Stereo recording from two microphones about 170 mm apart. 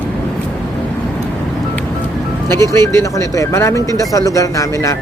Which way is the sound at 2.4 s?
15° left (ahead or behind).